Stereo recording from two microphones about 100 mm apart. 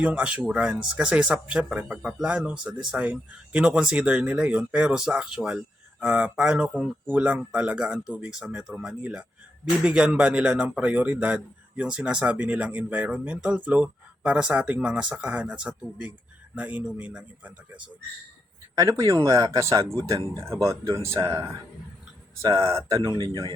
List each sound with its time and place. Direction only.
0.0 s speech: 10° right (ahead or behind)
18.8 s speech: 35° right (ahead or behind)